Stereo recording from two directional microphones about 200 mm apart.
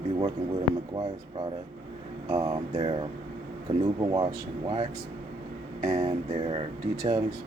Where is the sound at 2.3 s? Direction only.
25° right (ahead or behind).